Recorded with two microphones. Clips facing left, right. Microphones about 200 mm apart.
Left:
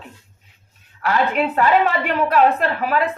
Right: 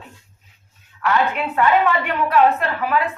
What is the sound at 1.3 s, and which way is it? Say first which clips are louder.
Speech: left 2 dB; 40° left (ahead or behind).